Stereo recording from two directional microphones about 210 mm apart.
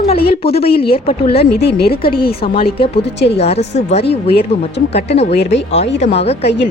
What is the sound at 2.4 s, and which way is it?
Speech, 25° left (ahead or behind).